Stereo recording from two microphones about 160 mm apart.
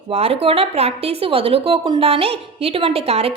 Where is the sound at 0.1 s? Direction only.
40° right (ahead or behind).